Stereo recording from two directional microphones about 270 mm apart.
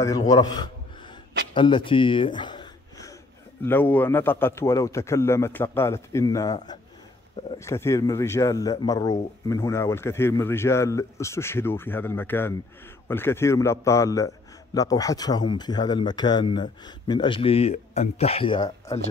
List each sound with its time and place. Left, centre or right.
0.0 s speech: centre
1.5 s a sound: centre
3.6 s a man's voice: centre